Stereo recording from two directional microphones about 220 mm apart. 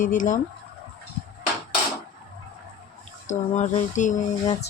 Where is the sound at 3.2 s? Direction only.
35° left (ahead or behind).